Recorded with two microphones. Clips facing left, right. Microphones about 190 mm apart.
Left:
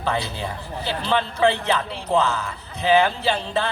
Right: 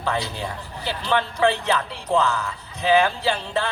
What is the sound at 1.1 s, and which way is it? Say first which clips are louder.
Speech: even; 15° left (ahead or behind).